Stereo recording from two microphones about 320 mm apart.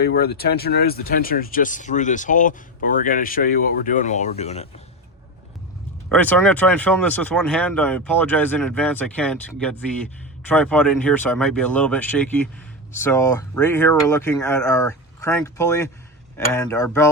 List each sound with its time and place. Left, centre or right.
0.0 s speech: left
6.1 s speech: centre